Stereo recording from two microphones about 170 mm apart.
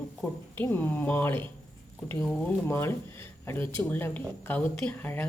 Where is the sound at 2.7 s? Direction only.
15° left (ahead or behind).